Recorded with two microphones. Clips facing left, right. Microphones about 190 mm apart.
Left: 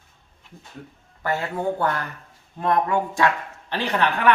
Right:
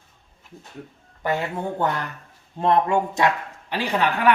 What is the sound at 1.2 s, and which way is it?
Speech, 20° right (ahead or behind).